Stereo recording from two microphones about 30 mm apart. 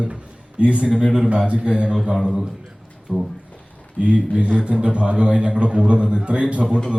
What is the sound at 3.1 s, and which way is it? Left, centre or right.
A man's voice, right.